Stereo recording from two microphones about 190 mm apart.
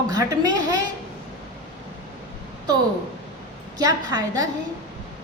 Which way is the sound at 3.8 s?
20° right (ahead or behind).